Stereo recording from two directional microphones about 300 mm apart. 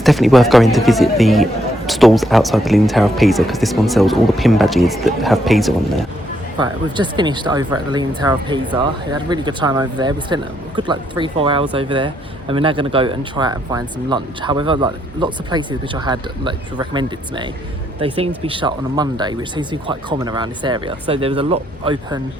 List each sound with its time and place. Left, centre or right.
0.0 s speech: centre
6.6 s speech: centre